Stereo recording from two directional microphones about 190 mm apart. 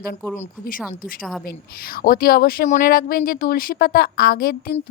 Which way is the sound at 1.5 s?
50° left (ahead or behind).